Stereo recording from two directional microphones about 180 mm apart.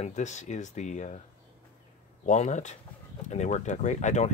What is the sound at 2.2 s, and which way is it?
Speech, 40° left (ahead or behind).